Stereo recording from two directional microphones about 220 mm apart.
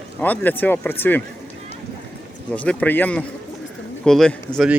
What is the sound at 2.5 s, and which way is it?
Speech, 5° left (ahead or behind).